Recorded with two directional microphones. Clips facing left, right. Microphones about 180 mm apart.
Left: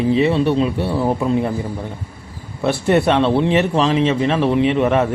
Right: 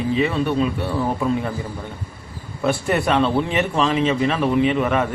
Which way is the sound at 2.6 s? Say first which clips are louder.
Left 4 dB; 30° left (ahead or behind).